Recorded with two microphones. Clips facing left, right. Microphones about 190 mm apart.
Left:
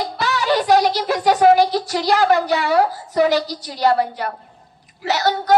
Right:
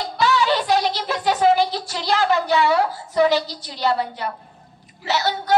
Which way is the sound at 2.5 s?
40° left (ahead or behind).